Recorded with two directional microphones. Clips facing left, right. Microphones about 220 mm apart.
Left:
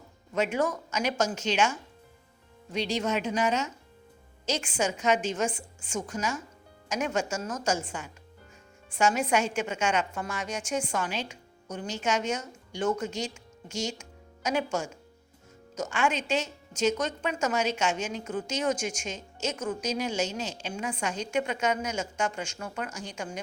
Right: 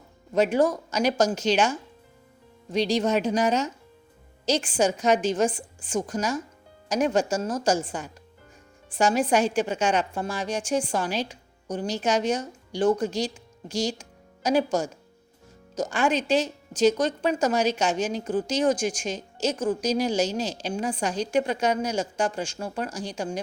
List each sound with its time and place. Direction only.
0.3 s a woman's voice: 35° right (ahead or behind)